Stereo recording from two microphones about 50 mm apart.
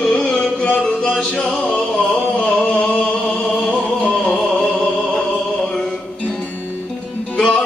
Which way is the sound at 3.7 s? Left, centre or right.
Left.